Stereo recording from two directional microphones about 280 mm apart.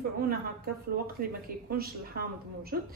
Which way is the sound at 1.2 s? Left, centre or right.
Right.